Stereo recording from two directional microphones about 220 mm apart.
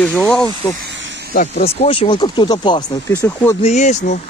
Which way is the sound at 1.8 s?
25° left (ahead or behind).